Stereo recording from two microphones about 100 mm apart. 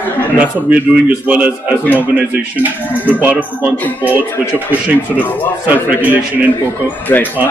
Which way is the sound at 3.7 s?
15° left (ahead or behind).